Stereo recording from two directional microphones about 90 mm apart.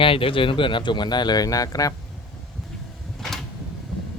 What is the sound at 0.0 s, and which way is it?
Speech, 85° left.